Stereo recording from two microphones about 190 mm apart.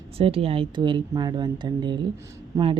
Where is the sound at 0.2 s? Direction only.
30° right (ahead or behind).